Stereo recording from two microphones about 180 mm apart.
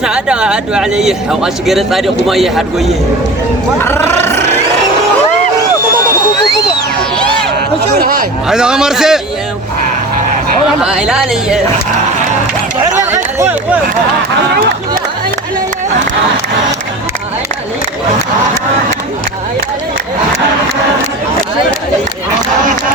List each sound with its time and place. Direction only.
0.0 s speech: 5° right (ahead or behind)
3.8 s speech: 10° left (ahead or behind)
7.9 s a sound: 55° right (ahead or behind)
8.4 s speech: 5° right (ahead or behind)
10.8 s speech: 5° right (ahead or behind)
13.4 s a sound: 10° right (ahead or behind)